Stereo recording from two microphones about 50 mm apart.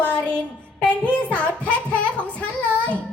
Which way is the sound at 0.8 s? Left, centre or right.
Left.